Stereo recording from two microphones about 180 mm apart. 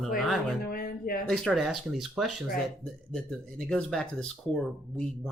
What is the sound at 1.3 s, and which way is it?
Speech, centre (ahead or behind).